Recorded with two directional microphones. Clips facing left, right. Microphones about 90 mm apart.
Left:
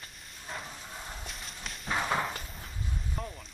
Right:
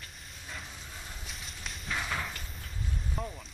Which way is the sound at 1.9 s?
35° left (ahead or behind).